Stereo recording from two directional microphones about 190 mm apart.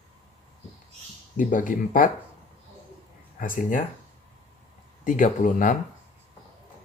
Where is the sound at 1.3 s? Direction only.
45° left (ahead or behind).